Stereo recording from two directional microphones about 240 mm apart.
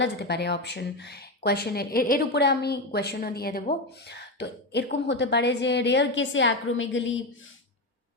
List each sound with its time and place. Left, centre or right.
0.0 s speech: left